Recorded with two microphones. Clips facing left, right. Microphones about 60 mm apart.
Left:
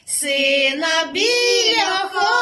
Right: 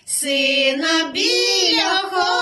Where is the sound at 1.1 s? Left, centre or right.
Left.